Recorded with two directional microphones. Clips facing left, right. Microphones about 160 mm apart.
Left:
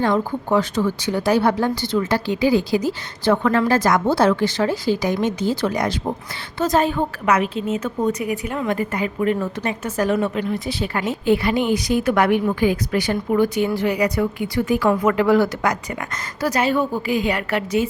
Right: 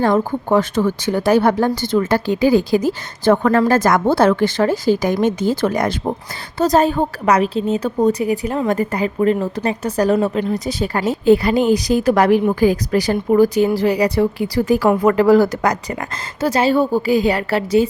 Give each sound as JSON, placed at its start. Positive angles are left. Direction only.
{"t": 0.0, "sound": "a woman's voice", "side_deg": -45}
{"t": 6.6, "sound": "a woman's voice", "side_deg": -40}